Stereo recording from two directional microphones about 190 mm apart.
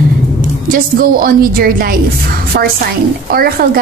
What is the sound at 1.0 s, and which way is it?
A woman's voice, 50° right (ahead or behind).